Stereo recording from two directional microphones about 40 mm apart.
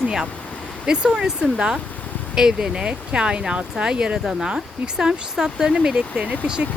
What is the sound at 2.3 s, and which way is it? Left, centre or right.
Speech, centre.